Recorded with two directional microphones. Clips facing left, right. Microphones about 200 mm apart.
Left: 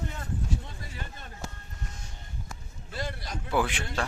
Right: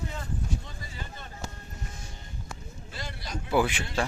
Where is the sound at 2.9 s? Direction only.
50° left (ahead or behind).